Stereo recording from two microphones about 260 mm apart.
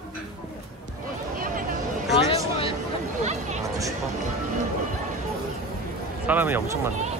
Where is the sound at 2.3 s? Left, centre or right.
Left.